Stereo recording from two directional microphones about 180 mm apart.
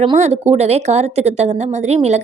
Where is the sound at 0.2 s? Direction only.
40° right (ahead or behind).